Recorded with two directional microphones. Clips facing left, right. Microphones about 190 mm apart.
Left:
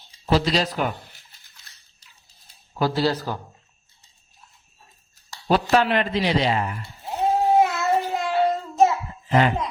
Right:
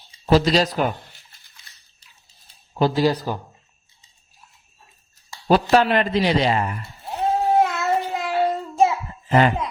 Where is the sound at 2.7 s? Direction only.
20° right (ahead or behind).